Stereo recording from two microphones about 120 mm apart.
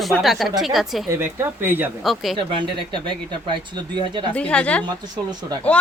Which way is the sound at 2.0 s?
Centre (ahead or behind).